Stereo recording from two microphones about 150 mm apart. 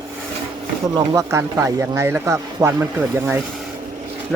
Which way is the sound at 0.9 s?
20° right (ahead or behind).